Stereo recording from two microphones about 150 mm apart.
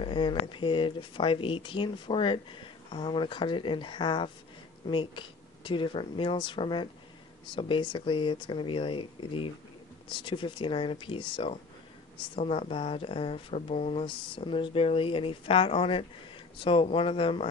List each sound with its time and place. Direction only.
0.0 s speech: 35° left (ahead or behind)